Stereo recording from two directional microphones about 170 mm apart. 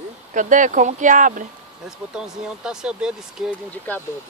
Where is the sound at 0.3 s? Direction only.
50° right (ahead or behind).